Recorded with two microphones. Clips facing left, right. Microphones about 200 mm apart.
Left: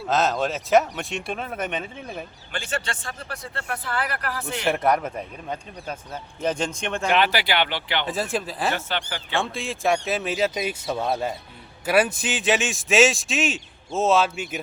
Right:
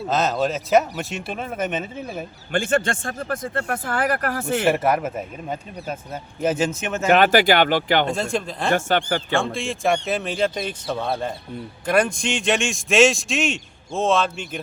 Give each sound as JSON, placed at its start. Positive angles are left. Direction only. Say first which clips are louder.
{"t": 0.1, "sound": "a man's voice", "louder": "right 1 dB", "side_deg": 0}
{"t": 2.5, "sound": "speech", "louder": "right 10 dB", "side_deg": -50}
{"t": 4.6, "sound": "a man's voice", "louder": "right 1 dB", "side_deg": -5}
{"t": 7.1, "sound": "speech", "louder": "right 7 dB", "side_deg": -45}
{"t": 8.0, "sound": "a man's voice", "louder": "right 3 dB", "side_deg": 5}
{"t": 8.7, "sound": "speech", "louder": "right 9 dB", "side_deg": -50}
{"t": 9.3, "sound": "a man's voice", "louder": "even", "side_deg": 0}